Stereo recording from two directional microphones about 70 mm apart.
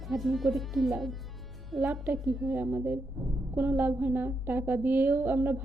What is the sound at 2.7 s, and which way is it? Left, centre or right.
A woman's voice, right.